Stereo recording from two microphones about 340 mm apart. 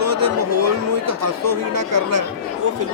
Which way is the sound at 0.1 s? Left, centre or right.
Right.